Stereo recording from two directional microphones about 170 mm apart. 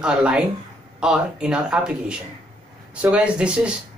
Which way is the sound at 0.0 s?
5° right (ahead or behind).